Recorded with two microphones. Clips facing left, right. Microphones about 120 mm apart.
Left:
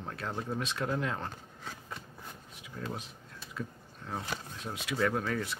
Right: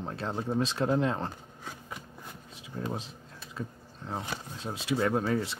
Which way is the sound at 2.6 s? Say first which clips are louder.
Right 4 dB; 25° right (ahead or behind).